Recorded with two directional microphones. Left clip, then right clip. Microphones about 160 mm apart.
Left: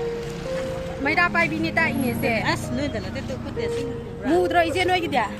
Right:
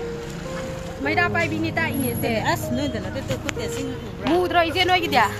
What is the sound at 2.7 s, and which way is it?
Speech, 40° right (ahead or behind).